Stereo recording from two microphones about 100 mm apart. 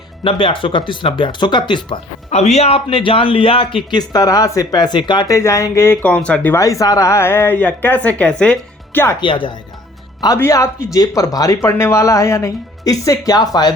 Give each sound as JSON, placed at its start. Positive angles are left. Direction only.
{"t": 0.3, "sound": "speech", "side_deg": 60}
{"t": 2.3, "sound": "speech", "side_deg": 90}
{"t": 4.1, "sound": "speech", "side_deg": 40}
{"t": 5.3, "sound": "speech", "side_deg": 30}
{"t": 6.0, "sound": "speech", "side_deg": 10}
{"t": 6.6, "sound": "speech", "side_deg": 35}
{"t": 9.2, "sound": "speech", "side_deg": 55}
{"t": 10.3, "sound": "speech", "side_deg": 30}